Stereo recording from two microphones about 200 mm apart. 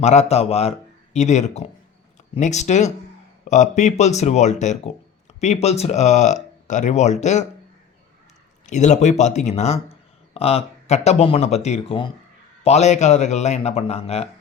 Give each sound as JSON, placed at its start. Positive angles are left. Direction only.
{"t": 0.0, "sound": "speech", "side_deg": 35}
{"t": 8.6, "sound": "speech", "side_deg": 35}